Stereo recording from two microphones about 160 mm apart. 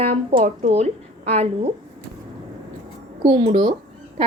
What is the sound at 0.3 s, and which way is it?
Speech, 50° right (ahead or behind).